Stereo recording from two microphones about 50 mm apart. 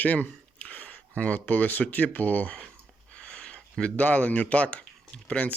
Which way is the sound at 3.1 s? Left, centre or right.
Centre.